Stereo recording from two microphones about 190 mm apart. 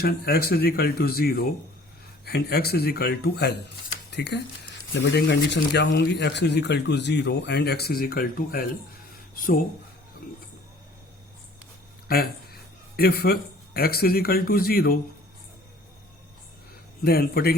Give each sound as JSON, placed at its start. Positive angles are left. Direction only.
{"t": 0.0, "sound": "speech", "side_deg": 55}
{"t": 12.0, "sound": "speech", "side_deg": 55}
{"t": 17.0, "sound": "speech", "side_deg": 55}